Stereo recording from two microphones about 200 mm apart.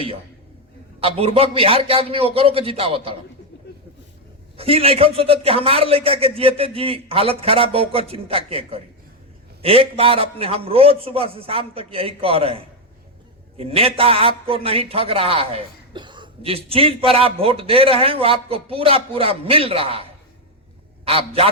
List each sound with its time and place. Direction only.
0.9 s a man's voice: 30° right (ahead or behind)
4.5 s a man's voice: 30° right (ahead or behind)